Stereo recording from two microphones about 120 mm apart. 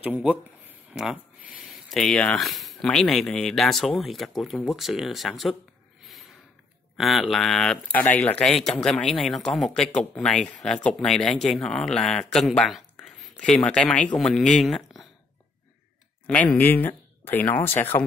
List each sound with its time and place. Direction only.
0.0 s speech: 10° right (ahead or behind)
0.9 s a sound: 5° right (ahead or behind)
2.0 s speech: 10° left (ahead or behind)
7.0 s speech: centre (ahead or behind)
16.5 s speech: 15° left (ahead or behind)